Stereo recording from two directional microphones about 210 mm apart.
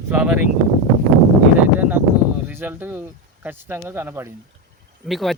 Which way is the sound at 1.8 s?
5° right (ahead or behind).